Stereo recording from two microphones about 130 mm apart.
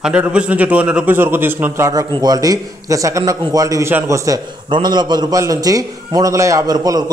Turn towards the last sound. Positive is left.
turn(degrees=-30)  # may be behind; listen again after turning